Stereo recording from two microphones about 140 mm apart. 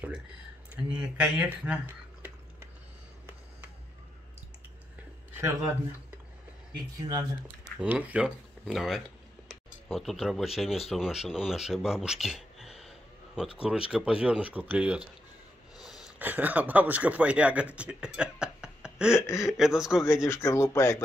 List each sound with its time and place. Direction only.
0.9 s speech: 10° right (ahead or behind)
6.7 s speech: 25° right (ahead or behind)
7.6 s speech: 10° right (ahead or behind)
19.1 s speech: 20° left (ahead or behind)
19.5 s speech: 5° right (ahead or behind)
20.2 s speech: 20° left (ahead or behind)